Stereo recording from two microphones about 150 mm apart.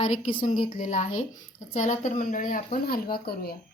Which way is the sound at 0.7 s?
50° left (ahead or behind).